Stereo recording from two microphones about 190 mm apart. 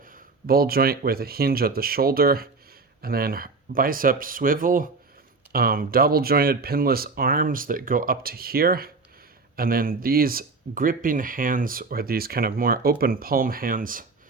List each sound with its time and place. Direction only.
0.0 s speech: 50° right (ahead or behind)